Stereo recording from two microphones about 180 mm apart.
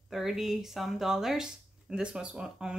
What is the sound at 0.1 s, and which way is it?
Speech, centre (ahead or behind).